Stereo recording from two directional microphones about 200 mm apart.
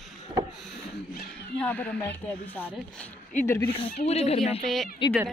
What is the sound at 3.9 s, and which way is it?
Speech, 35° left (ahead or behind).